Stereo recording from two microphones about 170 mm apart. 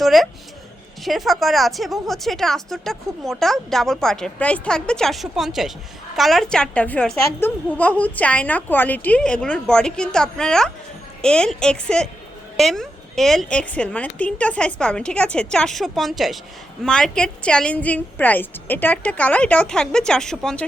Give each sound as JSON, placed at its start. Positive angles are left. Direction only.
{"t": 0.0, "sound": "a woman's voice", "side_deg": 0}